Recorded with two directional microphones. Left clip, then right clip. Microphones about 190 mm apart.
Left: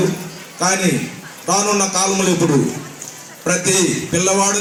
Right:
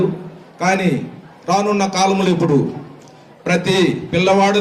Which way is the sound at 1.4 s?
25° left (ahead or behind).